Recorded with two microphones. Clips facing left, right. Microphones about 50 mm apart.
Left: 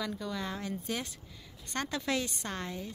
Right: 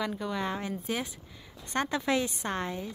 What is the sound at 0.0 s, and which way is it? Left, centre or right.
A woman's voice, right.